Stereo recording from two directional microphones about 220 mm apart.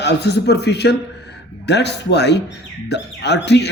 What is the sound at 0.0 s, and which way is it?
Speech, 50° left (ahead or behind).